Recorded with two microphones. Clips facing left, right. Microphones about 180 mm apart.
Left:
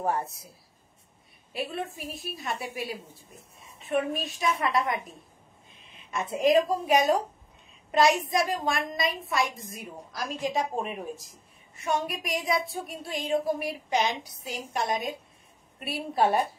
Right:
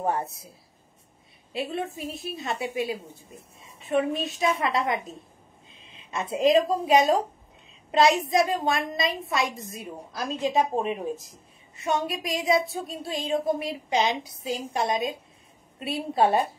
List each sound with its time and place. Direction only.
0.0 s a woman's voice: 20° right (ahead or behind)
1.5 s a woman's voice: 25° right (ahead or behind)
8.3 s a woman's voice: 25° right (ahead or behind)